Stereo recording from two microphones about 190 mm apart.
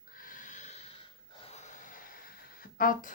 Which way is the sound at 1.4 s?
35° left (ahead or behind).